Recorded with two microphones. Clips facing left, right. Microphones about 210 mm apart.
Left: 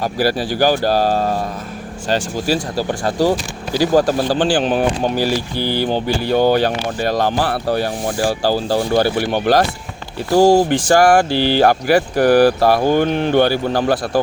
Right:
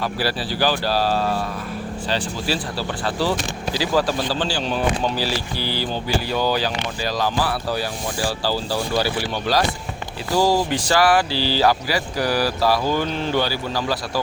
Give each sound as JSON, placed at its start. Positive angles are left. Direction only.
{"t": 0.0, "sound": "speech", "side_deg": 45}